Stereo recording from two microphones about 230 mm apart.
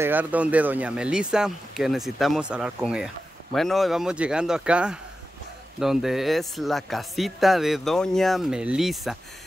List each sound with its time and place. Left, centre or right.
0.0 s a man's voice: centre